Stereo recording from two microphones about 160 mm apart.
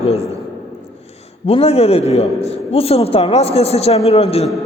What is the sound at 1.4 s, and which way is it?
A man's voice, 40° left (ahead or behind).